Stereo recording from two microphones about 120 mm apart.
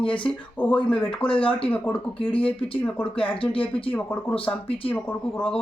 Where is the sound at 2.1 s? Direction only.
50° left (ahead or behind).